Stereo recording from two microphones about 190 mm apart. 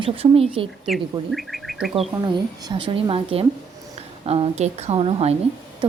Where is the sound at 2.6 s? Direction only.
25° right (ahead or behind).